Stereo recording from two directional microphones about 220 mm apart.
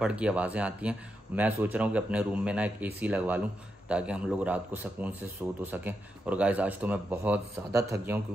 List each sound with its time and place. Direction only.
0.0 s a man's voice: 5° right (ahead or behind)